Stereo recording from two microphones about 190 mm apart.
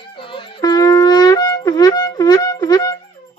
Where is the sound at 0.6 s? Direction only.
20° left (ahead or behind).